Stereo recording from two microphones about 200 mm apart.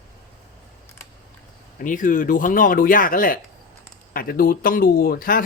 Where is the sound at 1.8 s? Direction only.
40° left (ahead or behind).